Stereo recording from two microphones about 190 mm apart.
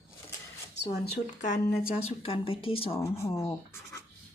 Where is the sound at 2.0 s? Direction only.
30° left (ahead or behind).